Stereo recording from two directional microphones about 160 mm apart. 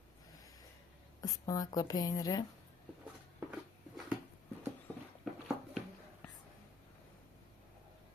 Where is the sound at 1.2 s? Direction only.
20° left (ahead or behind).